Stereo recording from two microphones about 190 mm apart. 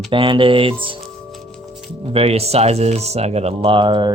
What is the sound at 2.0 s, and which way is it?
Speech, 30° right (ahead or behind).